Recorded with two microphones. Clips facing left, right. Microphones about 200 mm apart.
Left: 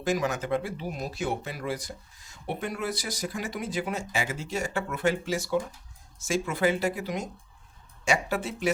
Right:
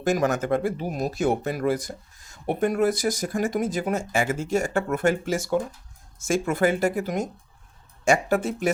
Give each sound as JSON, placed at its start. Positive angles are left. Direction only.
{"t": 0.0, "sound": "speech", "side_deg": -45}